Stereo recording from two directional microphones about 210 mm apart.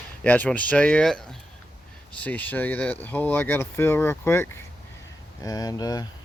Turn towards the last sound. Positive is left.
turn(degrees=15)  # may be behind; listen again after turning